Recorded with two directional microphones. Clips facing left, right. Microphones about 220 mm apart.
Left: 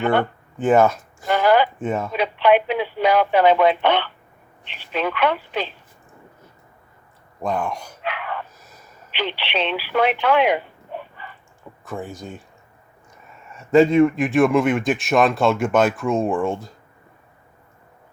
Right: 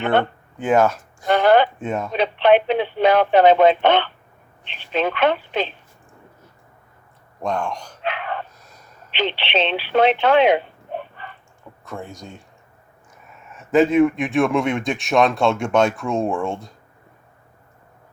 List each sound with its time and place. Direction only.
0.6 s a man's voice: 5° left (ahead or behind)
2.1 s speech: 25° right (ahead or behind)
7.4 s a man's voice: 5° left (ahead or behind)
8.0 s gasp: 25° right (ahead or behind)
8.5 s a sound: 5° left (ahead or behind)
9.1 s speech: 25° right (ahead or behind)
11.9 s speech: 5° left (ahead or behind)
13.4 s speech: centre (ahead or behind)